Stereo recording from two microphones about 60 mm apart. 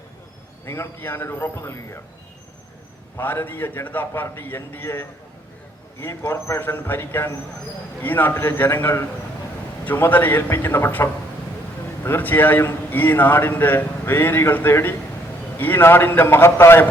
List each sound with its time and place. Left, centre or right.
0.6 s a man's voice: left
3.2 s a man's voice: left
6.6 s a man's voice: left